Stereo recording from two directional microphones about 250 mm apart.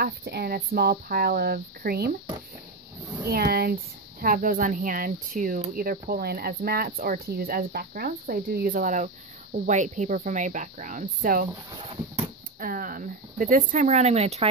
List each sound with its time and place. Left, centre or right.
0.0 s speech: right
3.3 s speech: right